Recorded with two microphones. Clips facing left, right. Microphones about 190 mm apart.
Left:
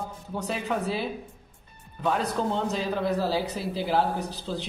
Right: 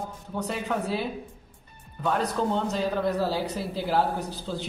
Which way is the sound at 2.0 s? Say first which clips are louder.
Even; centre (ahead or behind).